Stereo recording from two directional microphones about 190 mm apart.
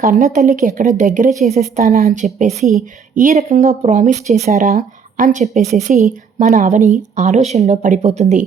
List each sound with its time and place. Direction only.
0.0 s speech: 45° right (ahead or behind)
4.4 s a woman's voice: 50° right (ahead or behind)